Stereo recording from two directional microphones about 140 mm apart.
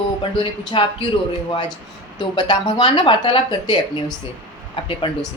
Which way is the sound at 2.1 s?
30° left (ahead or behind).